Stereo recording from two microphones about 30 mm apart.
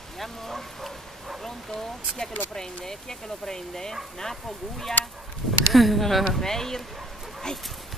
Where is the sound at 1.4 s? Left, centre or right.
Centre.